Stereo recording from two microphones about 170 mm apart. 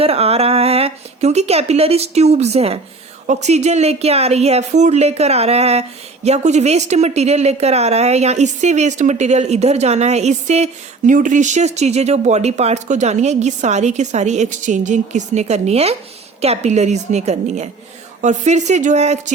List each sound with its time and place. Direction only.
0.0 s speech: 35° right (ahead or behind)